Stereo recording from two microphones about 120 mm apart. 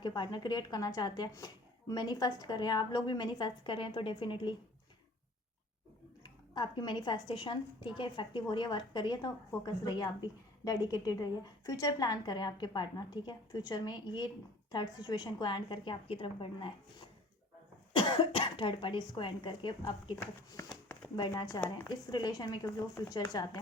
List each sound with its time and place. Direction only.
0.0 s a woman's voice: 35° left (ahead or behind)
6.2 s a woman's voice: 35° left (ahead or behind)
21.8 s a woman's voice: 35° left (ahead or behind)